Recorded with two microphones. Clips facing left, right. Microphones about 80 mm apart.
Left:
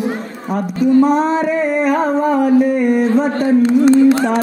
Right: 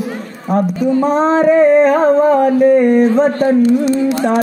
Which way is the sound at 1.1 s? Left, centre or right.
Right.